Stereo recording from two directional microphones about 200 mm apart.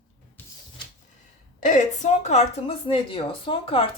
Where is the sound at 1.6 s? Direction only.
40° left (ahead or behind).